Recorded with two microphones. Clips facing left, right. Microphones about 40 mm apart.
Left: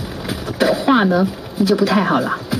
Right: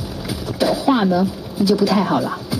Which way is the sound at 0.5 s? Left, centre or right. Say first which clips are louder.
Left 2 dB; left.